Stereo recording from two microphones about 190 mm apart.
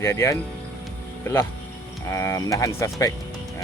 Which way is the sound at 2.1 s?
15° left (ahead or behind).